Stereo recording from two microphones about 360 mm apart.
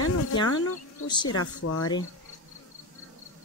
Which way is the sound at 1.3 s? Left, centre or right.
Left.